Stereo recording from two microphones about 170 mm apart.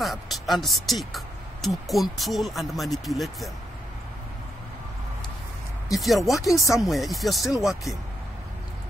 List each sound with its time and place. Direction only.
0.0 s speech: centre (ahead or behind)
5.9 s speech: centre (ahead or behind)
6.5 s speech: 20° left (ahead or behind)
6.8 s speech: centre (ahead or behind)